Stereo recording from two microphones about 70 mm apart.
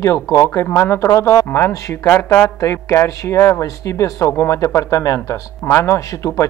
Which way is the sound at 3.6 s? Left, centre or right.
Left.